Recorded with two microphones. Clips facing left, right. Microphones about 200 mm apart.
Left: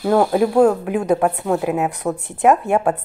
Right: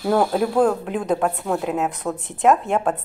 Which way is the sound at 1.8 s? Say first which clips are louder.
Left 3 dB; 15° left (ahead or behind).